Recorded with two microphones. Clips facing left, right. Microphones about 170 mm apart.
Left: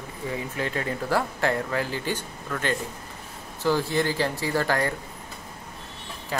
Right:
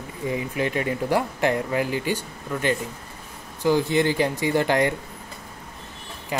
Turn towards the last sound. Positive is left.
turn(degrees=-20)  # may be behind; listen again after turning